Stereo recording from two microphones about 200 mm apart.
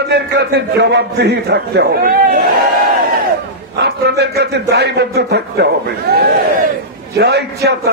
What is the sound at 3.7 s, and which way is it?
A man's voice, 55° right (ahead or behind).